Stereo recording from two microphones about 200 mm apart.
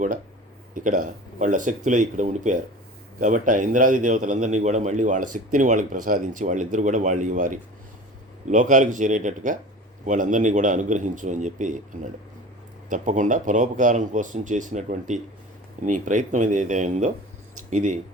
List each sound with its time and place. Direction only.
0.7 s a man's voice: 40° right (ahead or behind)
12.9 s a man's voice: 40° right (ahead or behind)